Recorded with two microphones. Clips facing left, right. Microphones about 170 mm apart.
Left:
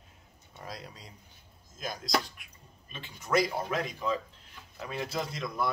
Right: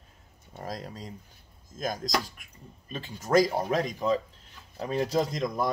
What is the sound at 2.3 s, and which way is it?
Speech, 40° right (ahead or behind).